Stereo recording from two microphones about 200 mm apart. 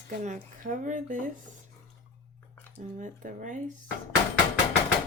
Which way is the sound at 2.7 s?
40° right (ahead or behind).